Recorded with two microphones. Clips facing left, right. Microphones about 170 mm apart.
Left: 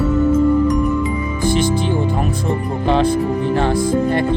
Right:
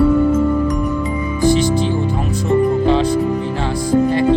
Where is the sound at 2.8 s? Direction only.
55° left (ahead or behind).